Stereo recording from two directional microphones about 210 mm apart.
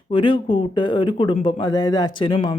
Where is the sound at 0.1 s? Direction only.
25° left (ahead or behind).